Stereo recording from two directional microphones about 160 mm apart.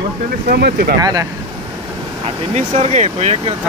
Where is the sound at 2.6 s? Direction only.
45° right (ahead or behind).